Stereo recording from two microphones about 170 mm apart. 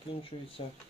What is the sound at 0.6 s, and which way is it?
Speech, 30° left (ahead or behind).